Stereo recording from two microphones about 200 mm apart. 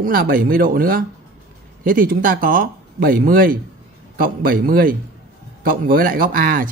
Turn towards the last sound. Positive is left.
turn(degrees=-45)  # may be behind; listen again after turning